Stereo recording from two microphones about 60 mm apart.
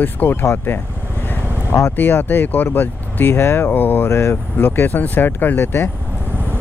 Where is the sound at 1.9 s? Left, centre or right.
Left.